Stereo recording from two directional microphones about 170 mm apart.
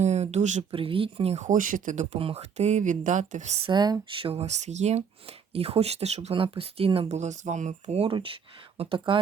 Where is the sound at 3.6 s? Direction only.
25° right (ahead or behind).